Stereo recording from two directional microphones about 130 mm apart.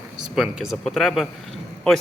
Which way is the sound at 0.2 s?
5° right (ahead or behind).